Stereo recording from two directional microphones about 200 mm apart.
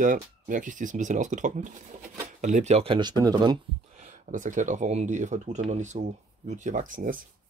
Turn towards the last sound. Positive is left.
turn(degrees=-45)  # may be behind; listen again after turning